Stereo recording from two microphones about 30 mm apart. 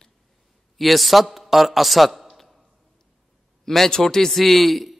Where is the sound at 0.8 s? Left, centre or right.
Centre.